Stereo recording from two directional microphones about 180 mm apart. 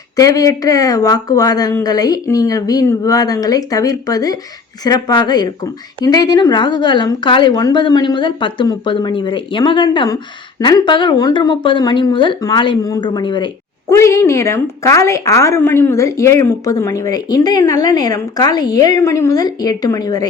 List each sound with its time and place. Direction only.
0.2 s a woman's voice: 20° left (ahead or behind)
13.9 s a woman's voice: 15° left (ahead or behind)